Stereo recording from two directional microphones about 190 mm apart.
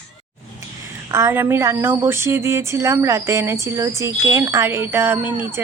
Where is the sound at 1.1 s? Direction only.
10° right (ahead or behind).